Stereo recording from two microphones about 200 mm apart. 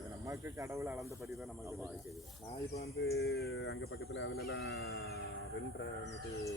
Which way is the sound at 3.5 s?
75° left (ahead or behind).